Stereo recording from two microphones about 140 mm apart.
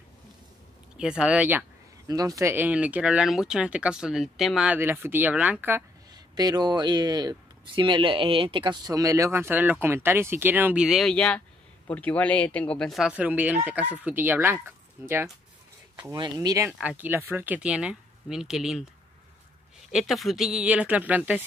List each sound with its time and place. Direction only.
0.9 s speech: 5° right (ahead or behind)
2.0 s speech: 25° right (ahead or behind); by 4.7 s centre (ahead or behind)
4.7 s speech: 15° right (ahead or behind)
6.1 s speech: 30° right (ahead or behind); by 13.1 s centre (ahead or behind)
13.1 s speech: 10° right (ahead or behind)
16.7 s speech: 10° right (ahead or behind)
19.9 s speech: centre (ahead or behind)